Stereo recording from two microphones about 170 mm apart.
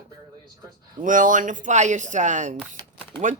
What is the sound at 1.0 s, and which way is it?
Speech, 50° right (ahead or behind).